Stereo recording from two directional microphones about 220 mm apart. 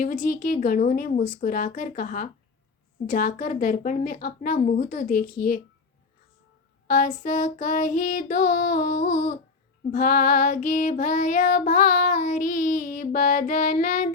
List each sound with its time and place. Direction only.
0.0 s child singing: 35° left (ahead or behind)
6.8 s child singing: 35° left (ahead or behind)